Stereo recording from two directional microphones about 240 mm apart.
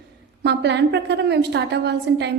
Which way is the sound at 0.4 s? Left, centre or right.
Right.